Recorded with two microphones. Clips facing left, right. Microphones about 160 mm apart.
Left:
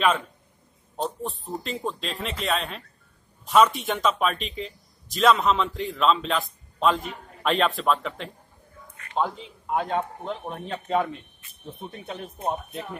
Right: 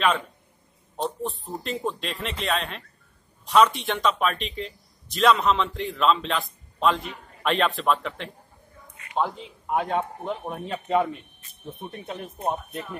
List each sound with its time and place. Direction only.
1.0 s a man's voice: centre (ahead or behind)
8.9 s a sound: 20° right (ahead or behind)
9.2 s a man's voice: 10° right (ahead or behind)